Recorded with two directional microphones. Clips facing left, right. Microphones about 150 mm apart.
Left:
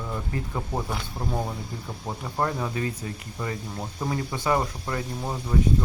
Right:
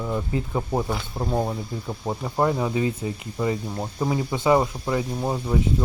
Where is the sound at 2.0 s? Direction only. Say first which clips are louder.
Right 5 dB; 25° right (ahead or behind).